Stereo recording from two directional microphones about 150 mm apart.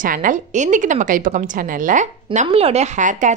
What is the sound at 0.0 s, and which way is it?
A woman's voice, 65° right (ahead or behind).